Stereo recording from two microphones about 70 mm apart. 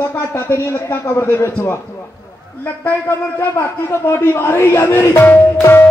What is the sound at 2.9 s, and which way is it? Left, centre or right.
A man's voice, left.